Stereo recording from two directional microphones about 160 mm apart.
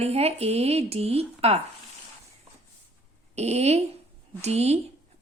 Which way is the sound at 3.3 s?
40° right (ahead or behind).